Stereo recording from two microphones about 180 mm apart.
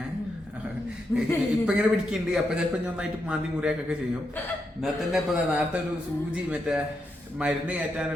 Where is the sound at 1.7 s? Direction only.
5° right (ahead or behind).